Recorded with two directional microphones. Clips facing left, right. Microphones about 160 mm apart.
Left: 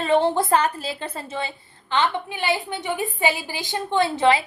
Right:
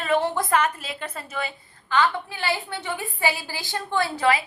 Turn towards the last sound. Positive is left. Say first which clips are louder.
# left 3 dB
turn(degrees=25)  # may be behind; listen again after turning